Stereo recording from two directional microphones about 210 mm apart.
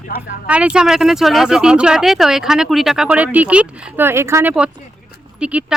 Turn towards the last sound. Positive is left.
turn(degrees=-5)  # may be behind; listen again after turning